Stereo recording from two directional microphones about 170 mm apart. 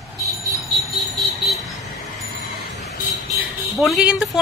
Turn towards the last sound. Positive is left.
turn(degrees=0)  # may be behind; listen again after turning